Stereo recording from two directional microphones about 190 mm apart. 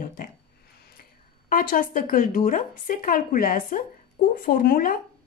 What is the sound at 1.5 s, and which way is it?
Speech, 50° left (ahead or behind).